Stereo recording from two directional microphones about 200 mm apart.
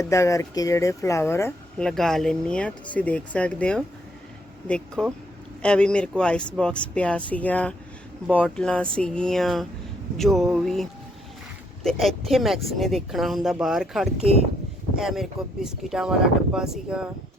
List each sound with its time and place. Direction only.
0.0 s speech: 15° left (ahead or behind)
1.9 s speech: centre (ahead or behind)
5.0 s speech: 5° left (ahead or behind)